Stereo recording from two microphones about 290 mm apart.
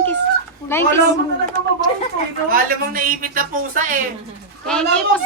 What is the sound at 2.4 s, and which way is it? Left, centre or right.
Speech, right.